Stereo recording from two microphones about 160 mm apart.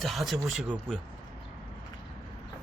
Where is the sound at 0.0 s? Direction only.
Centre (ahead or behind).